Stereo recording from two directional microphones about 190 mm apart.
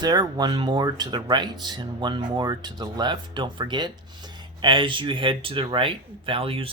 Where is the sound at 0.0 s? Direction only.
20° right (ahead or behind).